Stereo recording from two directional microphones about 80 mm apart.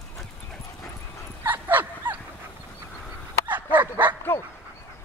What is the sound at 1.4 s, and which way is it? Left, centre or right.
Dog, right.